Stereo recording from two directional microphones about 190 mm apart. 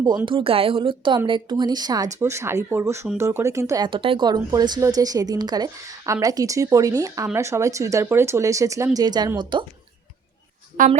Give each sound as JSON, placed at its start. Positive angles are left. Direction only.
{"t": 0.0, "sound": "a woman's voice", "side_deg": -20}
{"t": 10.8, "sound": "speech", "side_deg": -45}